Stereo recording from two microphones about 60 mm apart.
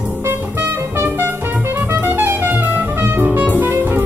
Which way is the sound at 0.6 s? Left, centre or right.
Right.